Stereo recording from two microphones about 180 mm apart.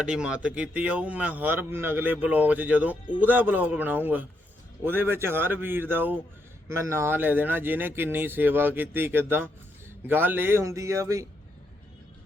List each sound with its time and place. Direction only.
0.0 s a man's voice: 5° right (ahead or behind)